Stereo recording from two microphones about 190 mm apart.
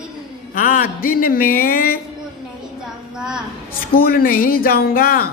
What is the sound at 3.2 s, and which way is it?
Speech, 5° right (ahead or behind).